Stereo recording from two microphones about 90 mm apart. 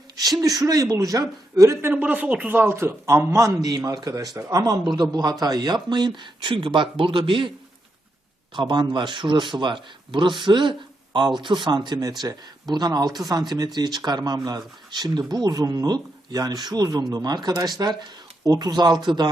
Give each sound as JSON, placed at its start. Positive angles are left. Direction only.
{"t": 0.2, "sound": "speech", "side_deg": -45}
{"t": 1.9, "sound": "a man's voice", "side_deg": -15}
{"t": 8.5, "sound": "speech", "side_deg": -55}